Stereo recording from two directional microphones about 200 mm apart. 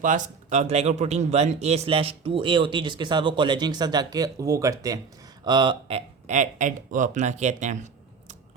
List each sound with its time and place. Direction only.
0.0 s speech: 40° right (ahead or behind)